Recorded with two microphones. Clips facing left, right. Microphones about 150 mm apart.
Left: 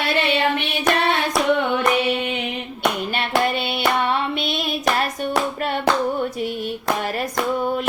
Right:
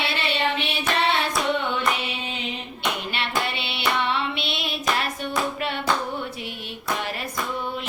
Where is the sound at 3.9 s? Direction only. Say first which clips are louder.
Left 2 dB; 45° left (ahead or behind).